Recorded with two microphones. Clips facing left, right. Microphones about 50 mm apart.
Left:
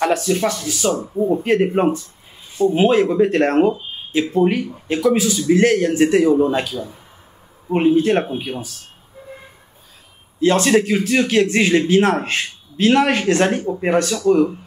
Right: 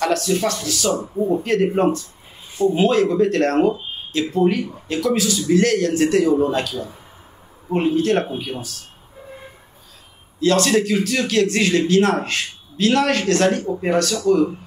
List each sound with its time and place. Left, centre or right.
0.0 s speech: centre
1.1 s speech: centre
1.4 s speech: left
10.4 s speech: left